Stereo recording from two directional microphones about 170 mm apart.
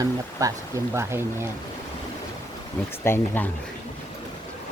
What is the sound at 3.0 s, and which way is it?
Speech, 15° left (ahead or behind).